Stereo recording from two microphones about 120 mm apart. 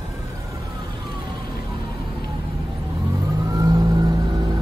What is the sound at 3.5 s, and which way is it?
Vehicle, 30° right (ahead or behind).